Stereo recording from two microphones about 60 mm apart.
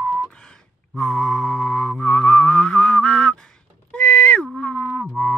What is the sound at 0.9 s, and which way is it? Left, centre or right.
Mantra, centre.